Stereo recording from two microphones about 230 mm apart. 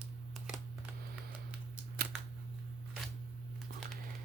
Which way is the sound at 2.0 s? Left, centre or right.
Right.